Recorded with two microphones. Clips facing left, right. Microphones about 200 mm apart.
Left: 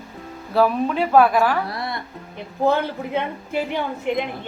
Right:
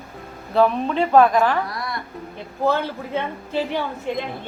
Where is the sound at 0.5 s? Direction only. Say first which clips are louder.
Even; 5° left (ahead or behind).